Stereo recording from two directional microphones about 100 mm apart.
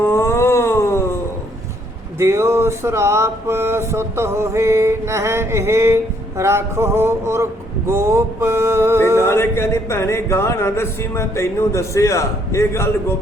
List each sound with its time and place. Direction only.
0.0 s a sound: 25° left (ahead or behind)
2.1 s mantra: 25° right (ahead or behind)
9.2 s speech: 25° left (ahead or behind)